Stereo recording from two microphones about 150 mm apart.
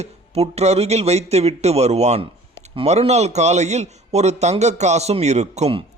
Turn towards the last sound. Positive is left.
turn(degrees=-45)  # may be behind; listen again after turning